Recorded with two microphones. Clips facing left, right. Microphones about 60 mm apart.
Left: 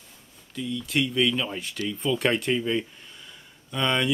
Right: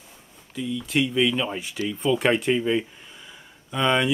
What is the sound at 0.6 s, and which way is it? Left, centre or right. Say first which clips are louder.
Speech: right 2 dB; centre.